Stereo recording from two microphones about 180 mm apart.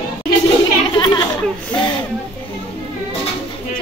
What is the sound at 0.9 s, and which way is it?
Speech, 25° left (ahead or behind).